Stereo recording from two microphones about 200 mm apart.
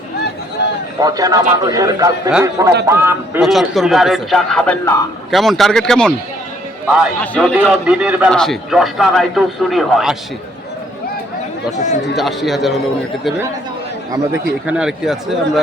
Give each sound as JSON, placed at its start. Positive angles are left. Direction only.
{"t": 1.0, "sound": "a man's voice", "side_deg": -20}
{"t": 3.4, "sound": "a man's voice", "side_deg": 0}
{"t": 12.1, "sound": "a man's voice", "side_deg": 0}
{"t": 14.7, "sound": "a man's voice", "side_deg": -5}